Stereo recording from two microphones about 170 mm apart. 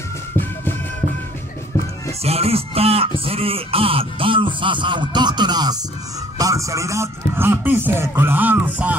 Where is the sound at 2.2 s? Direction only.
35° right (ahead or behind).